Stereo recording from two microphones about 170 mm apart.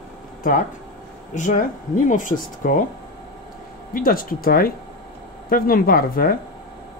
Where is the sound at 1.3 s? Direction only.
50° left (ahead or behind).